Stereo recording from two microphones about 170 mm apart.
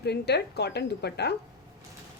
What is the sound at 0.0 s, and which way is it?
A woman's voice, 75° left (ahead or behind).